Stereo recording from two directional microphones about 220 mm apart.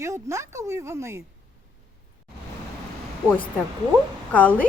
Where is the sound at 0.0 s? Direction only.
15° right (ahead or behind).